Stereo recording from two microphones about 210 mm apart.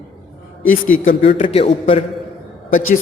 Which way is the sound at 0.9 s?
40° left (ahead or behind).